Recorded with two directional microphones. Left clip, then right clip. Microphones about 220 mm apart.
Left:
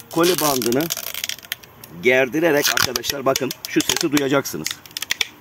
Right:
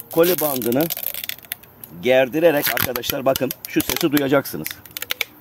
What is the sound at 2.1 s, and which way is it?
Speech, 35° right (ahead or behind).